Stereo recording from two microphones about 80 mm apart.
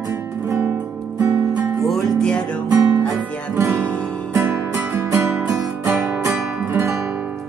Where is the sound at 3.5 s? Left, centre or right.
Right.